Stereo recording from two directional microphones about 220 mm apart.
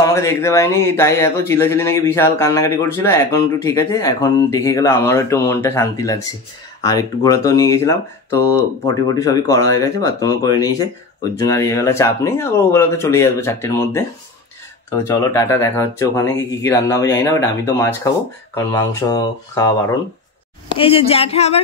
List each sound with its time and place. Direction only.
0.0 s speech: 15° left (ahead or behind)